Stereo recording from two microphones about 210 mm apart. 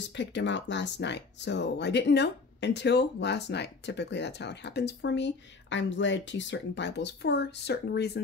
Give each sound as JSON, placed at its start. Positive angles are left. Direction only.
{"t": 0.1, "sound": "speech", "side_deg": 60}